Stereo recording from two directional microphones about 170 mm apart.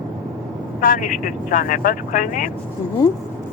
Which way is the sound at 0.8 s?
50° left (ahead or behind).